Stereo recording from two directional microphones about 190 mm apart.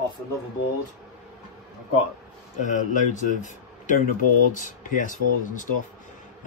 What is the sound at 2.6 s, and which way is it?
Speech, 40° left (ahead or behind).